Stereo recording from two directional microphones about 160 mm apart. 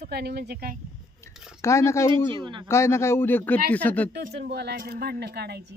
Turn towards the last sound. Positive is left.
turn(degrees=-90)